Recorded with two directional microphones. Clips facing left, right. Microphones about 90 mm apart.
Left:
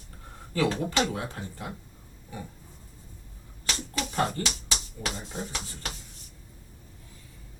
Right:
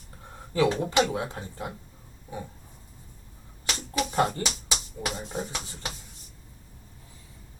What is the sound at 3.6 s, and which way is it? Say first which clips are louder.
Speech: right 3 dB; 15° right (ahead or behind).